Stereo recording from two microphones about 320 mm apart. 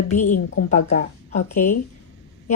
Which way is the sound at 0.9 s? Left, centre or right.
Left.